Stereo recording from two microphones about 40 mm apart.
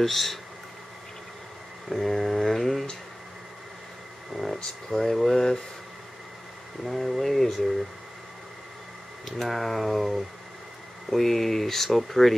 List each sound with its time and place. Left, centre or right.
0.0 s speech: centre
1.9 s a sound: centre
4.6 s speech: centre
6.8 s speech: centre
9.2 s speech: centre